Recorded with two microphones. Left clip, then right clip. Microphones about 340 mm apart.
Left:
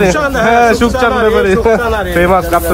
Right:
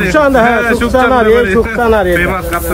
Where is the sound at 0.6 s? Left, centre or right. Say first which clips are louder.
Left 1 dB; centre.